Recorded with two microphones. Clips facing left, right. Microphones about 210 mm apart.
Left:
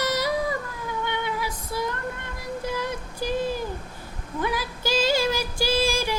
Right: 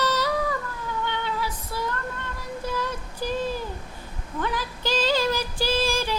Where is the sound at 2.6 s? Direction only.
10° left (ahead or behind).